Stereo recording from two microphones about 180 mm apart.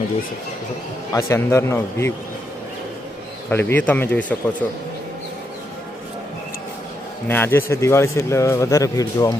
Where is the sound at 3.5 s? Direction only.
10° left (ahead or behind).